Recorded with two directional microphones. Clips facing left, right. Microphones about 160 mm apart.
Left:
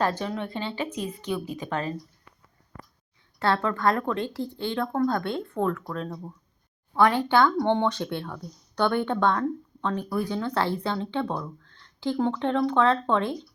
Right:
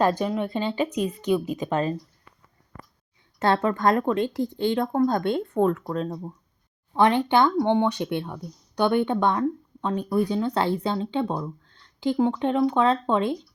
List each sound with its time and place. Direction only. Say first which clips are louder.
0.0 s speech: right 4 dB; 15° right (ahead or behind)
3.3 s a woman's voice: right 3 dB; 20° right (ahead or behind)